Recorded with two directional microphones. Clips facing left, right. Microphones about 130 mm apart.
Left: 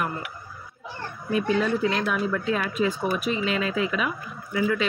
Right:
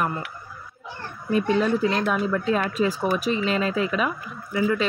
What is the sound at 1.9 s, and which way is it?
Speech, 30° right (ahead or behind).